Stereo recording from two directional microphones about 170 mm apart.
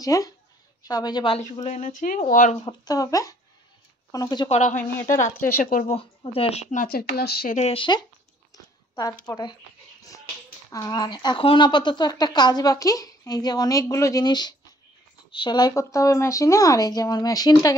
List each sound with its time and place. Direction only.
0.0 s speech: 20° left (ahead or behind); by 2.5 s 50° left (ahead or behind)
2.6 s speech: 25° left (ahead or behind)
4.5 s speech: 45° left (ahead or behind)
4.7 s a woman's voice: 15° left (ahead or behind)
5.4 s speech: 55° left (ahead or behind)
5.9 s speech: 35° left (ahead or behind); by 7.5 s 65° left (ahead or behind)
7.5 s speech: 35° left (ahead or behind)
9.2 s speech: 25° left (ahead or behind)
10.7 s speech: 20° left (ahead or behind)